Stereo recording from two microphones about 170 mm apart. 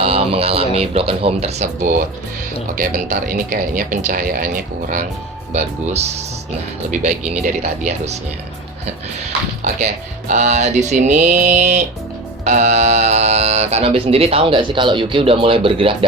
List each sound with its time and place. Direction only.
0.0 s speech: 35° right (ahead or behind)
1.8 s speech: 55° right (ahead or behind)
5.5 s speech: 40° right (ahead or behind)
9.8 s speech: 45° right (ahead or behind)